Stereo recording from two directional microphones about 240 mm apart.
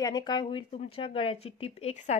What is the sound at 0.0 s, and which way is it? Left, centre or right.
Speech, centre.